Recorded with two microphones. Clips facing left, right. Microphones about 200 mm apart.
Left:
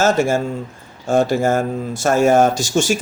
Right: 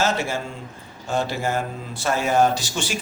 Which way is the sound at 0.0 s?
45° left (ahead or behind).